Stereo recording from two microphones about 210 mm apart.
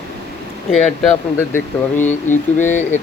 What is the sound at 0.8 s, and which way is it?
Speech, 5° left (ahead or behind).